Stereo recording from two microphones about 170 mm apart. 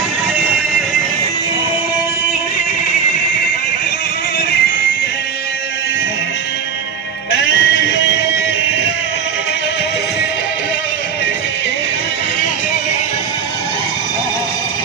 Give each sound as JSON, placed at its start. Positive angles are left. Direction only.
{"t": 0.3, "sound": "music", "side_deg": -5}
{"t": 7.3, "sound": "music", "side_deg": 90}